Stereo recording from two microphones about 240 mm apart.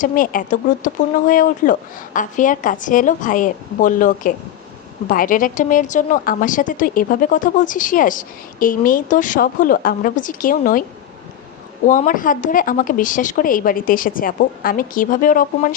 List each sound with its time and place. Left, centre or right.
0.0 s a woman's voice: left
11.9 s a woman's voice: left